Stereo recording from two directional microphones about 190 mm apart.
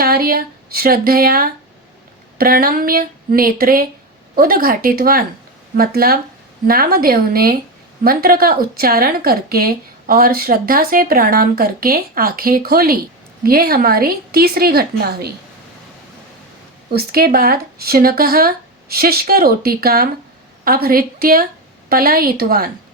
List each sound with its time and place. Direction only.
0.0 s speech: 50° right (ahead or behind)
17.0 s speech: 55° right (ahead or behind)